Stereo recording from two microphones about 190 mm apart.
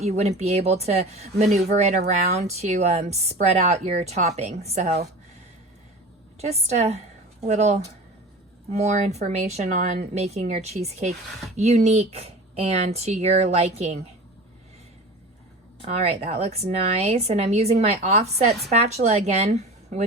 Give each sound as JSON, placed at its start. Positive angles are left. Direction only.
{"t": 0.0, "sound": "speech", "side_deg": -35}
{"t": 6.4, "sound": "speech", "side_deg": -35}
{"t": 15.8, "sound": "speech", "side_deg": -35}